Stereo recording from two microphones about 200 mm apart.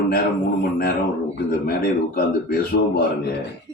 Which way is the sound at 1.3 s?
50° left (ahead or behind).